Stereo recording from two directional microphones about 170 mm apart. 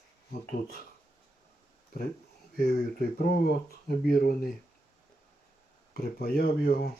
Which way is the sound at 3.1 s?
60° left (ahead or behind).